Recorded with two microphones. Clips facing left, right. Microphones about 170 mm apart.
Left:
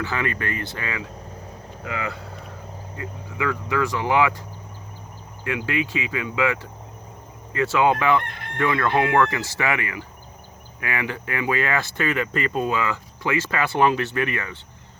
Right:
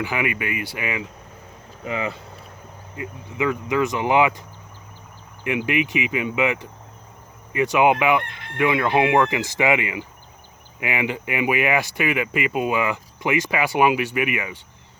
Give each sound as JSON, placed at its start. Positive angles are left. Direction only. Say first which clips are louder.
{"t": 0.0, "sound": "speech", "louder": "right 1 dB", "side_deg": -15}